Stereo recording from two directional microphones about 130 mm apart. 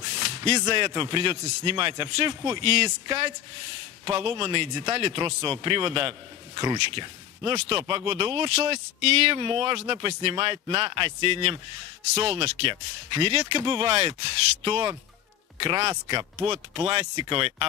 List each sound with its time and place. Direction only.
0.0 s a man's voice: 45° right (ahead or behind)